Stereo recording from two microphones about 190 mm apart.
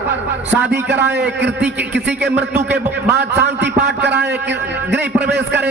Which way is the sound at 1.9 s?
65° right (ahead or behind).